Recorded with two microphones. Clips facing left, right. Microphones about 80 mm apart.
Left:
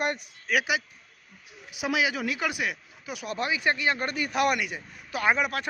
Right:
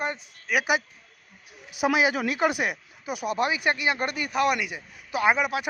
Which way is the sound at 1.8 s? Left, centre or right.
Right.